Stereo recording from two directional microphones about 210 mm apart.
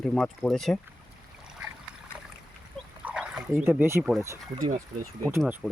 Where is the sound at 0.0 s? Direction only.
Centre (ahead or behind).